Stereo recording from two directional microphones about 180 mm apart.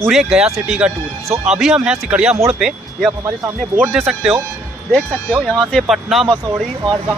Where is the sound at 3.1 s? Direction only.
15° right (ahead or behind).